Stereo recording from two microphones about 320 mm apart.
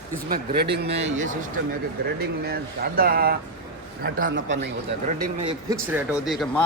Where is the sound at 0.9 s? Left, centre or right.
Centre.